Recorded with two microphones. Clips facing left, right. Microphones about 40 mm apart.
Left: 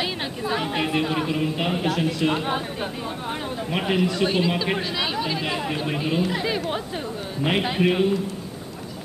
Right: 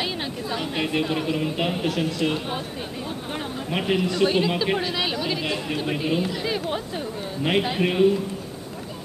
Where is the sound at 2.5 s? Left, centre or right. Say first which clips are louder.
Left 3 dB; centre.